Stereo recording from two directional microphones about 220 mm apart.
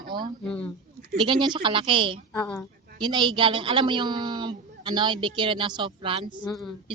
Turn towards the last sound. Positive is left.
turn(degrees=0)  # may be behind; listen again after turning